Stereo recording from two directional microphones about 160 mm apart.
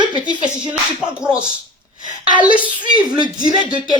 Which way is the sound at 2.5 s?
10° right (ahead or behind).